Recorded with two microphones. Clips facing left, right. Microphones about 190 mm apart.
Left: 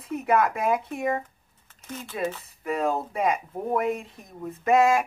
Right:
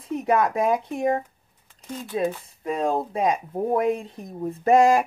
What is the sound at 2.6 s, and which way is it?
Speech, 30° right (ahead or behind).